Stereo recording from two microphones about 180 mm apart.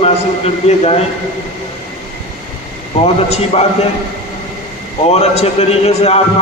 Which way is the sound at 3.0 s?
40° left (ahead or behind).